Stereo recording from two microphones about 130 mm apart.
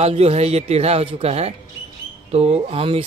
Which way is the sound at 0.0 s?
55° right (ahead or behind).